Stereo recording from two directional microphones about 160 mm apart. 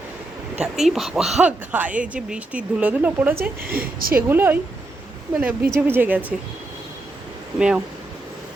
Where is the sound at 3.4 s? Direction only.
65° right (ahead or behind).